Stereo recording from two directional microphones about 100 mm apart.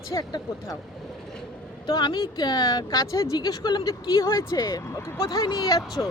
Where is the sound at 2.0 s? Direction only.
45° left (ahead or behind).